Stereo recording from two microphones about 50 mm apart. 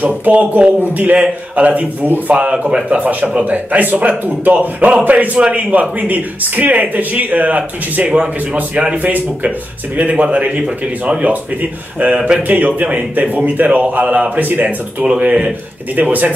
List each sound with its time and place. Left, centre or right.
0.2 s a man's voice: right
2.3 s speech: centre
3.0 s speech: right
12.4 s speech: right
15.0 s speech: right